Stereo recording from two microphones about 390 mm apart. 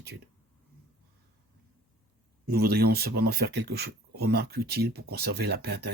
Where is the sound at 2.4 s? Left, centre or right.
Right.